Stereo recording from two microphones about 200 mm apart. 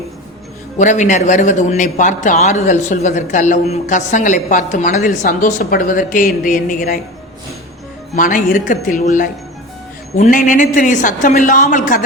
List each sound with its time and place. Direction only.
0.8 s a man's voice: 35° left (ahead or behind)
8.1 s a man's voice: 40° left (ahead or behind)